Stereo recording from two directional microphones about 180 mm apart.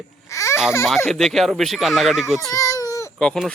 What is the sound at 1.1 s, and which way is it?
Speech, centre (ahead or behind).